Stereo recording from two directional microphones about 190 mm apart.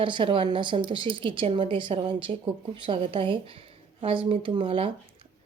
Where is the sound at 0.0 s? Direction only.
25° right (ahead or behind).